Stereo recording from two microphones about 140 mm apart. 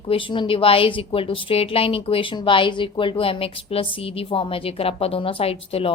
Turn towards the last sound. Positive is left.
turn(degrees=45)  # may be behind; listen again after turning